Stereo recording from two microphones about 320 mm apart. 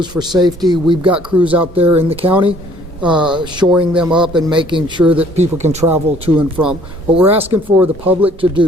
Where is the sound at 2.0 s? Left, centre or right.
Centre.